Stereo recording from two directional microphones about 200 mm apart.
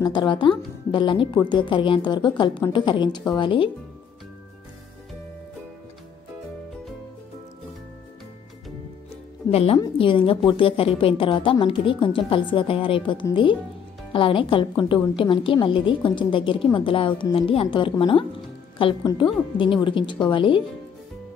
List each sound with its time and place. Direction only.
0.0 s a woman's voice: 20° left (ahead or behind)
9.1 s music: 30° left (ahead or behind)
9.8 s a woman's voice: 25° left (ahead or behind)